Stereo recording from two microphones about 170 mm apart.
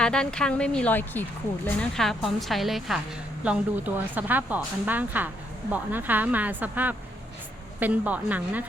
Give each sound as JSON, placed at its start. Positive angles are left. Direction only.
{"t": 0.0, "sound": "a woman's voice", "side_deg": 5}